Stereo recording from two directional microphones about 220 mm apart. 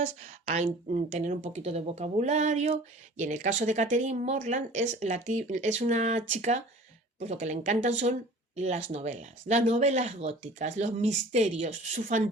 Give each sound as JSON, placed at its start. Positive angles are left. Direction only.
{"t": 0.2, "sound": "speech", "side_deg": -30}